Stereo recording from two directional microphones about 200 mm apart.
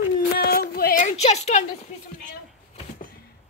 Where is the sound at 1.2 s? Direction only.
35° left (ahead or behind).